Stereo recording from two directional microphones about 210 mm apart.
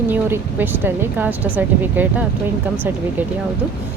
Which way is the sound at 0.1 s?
10° right (ahead or behind).